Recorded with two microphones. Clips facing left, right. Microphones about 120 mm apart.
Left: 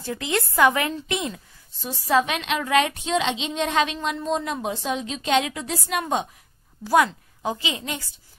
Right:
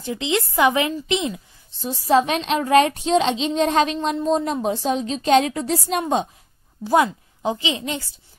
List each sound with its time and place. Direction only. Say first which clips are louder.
0.0 s a woman's voice: right 3 dB; 15° right (ahead or behind)